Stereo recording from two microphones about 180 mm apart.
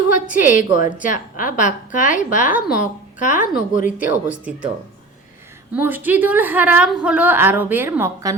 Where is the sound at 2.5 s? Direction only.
5° right (ahead or behind).